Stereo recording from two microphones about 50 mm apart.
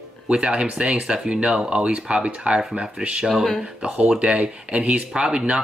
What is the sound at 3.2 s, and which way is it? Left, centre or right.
Speech, centre.